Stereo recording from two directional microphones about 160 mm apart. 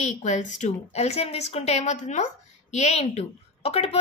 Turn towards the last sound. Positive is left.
turn(degrees=40)  # may be behind; listen again after turning